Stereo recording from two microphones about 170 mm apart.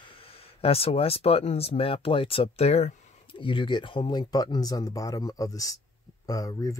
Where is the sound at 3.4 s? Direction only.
30° left (ahead or behind).